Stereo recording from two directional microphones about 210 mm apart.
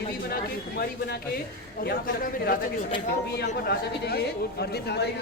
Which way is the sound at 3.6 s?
50° left (ahead or behind).